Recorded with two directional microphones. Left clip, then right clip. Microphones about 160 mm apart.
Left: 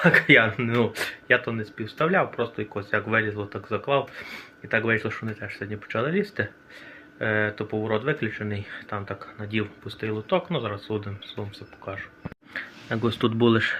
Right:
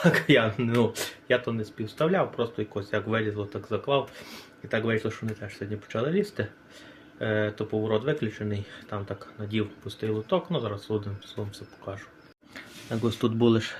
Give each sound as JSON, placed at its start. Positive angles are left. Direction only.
{"t": 0.0, "sound": "speech", "side_deg": -20}
{"t": 12.5, "sound": "speech", "side_deg": -5}